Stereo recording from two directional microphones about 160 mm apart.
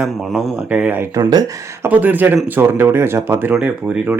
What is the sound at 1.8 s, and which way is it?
Speech, 10° right (ahead or behind).